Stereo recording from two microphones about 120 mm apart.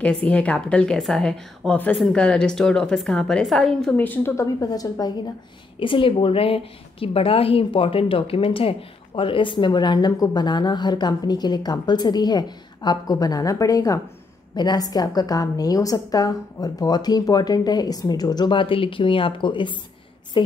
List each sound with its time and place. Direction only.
0.0 s a woman's voice: 10° left (ahead or behind)
3.9 s a woman's voice: 15° left (ahead or behind); by 5.1 s 30° left (ahead or behind)
5.8 s a woman's voice: 45° left (ahead or behind)